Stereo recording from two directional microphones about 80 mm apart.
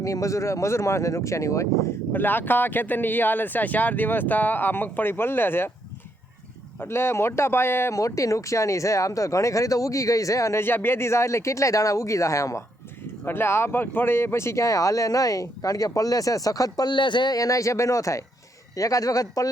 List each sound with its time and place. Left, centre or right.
0.0 s speech: left
2.1 s speech: left
6.8 s speech: left
7.9 s speech: left
10.6 s speech: left
13.2 s speech: left
16.9 s speech: left
17.3 s speech: left